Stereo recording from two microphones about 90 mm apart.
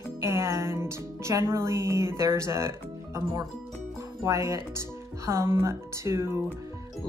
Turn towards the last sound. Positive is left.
turn(degrees=-30)  # may be behind; listen again after turning